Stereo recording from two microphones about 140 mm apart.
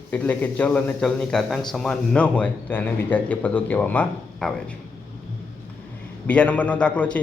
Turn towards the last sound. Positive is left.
turn(degrees=10)  # may be behind; listen again after turning